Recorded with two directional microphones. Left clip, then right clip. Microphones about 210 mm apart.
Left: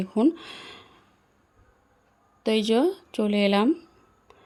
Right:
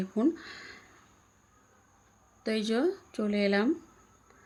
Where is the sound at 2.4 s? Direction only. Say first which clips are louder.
Left 7 dB; 35° left (ahead or behind).